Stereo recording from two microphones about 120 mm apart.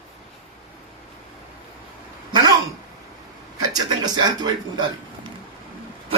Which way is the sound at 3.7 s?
35° right (ahead or behind).